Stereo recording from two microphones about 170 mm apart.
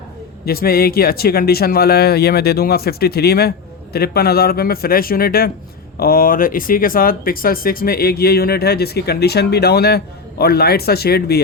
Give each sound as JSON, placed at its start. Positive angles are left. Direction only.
{"t": 0.4, "sound": "speech", "side_deg": 60}